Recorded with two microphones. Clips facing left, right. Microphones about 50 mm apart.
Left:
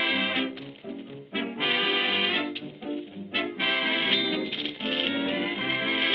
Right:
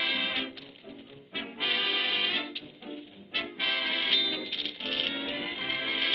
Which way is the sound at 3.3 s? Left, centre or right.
Centre.